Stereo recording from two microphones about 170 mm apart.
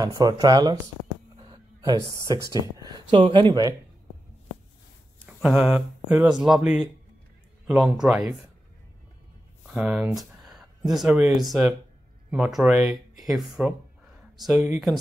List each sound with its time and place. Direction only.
0.0 s speech: 20° right (ahead or behind)
1.3 s a sound: 25° right (ahead or behind)
2.8 s speech: 25° right (ahead or behind)
5.2 s speech: centre (ahead or behind)
9.8 s speech: 5° right (ahead or behind)